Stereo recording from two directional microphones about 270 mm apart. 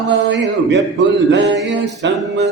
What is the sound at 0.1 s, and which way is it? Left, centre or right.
Speech, right.